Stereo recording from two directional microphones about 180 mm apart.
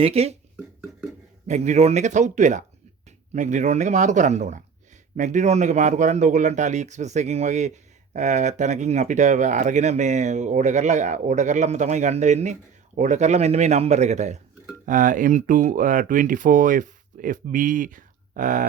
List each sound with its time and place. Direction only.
0.0 s a man's voice: 35° right (ahead or behind)
0.5 s a sound: 5° right (ahead or behind)
1.5 s a man's voice: 40° right (ahead or behind)